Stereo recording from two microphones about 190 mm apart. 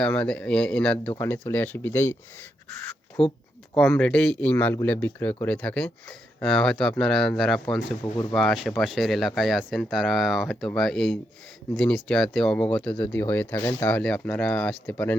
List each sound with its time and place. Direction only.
0.0 s a man's voice: 5° left (ahead or behind)
3.2 s speech: 30° left (ahead or behind)
3.8 s a man's voice: 5° left (ahead or behind)